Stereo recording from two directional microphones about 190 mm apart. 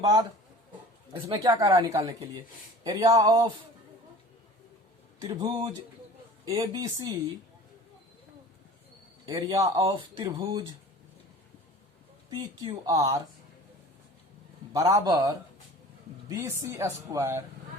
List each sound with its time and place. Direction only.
0.0 s speech: 20° right (ahead or behind)
5.2 s speech: 15° right (ahead or behind)
9.2 s speech: 20° right (ahead or behind)
12.3 s speech: 20° right (ahead or behind)
14.7 s speech: 15° right (ahead or behind)
16.4 s speech: 15° right (ahead or behind)